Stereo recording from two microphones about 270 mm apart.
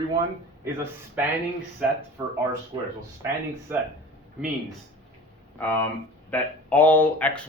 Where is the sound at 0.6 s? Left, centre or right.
Centre.